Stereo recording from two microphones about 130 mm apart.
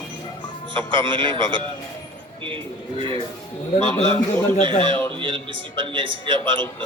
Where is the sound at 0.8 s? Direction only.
40° right (ahead or behind).